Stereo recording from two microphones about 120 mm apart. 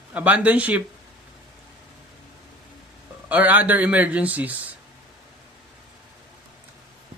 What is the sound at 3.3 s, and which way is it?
Speech, 15° right (ahead or behind).